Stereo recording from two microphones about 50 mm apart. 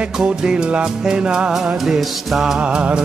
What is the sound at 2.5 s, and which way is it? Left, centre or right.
Music, right.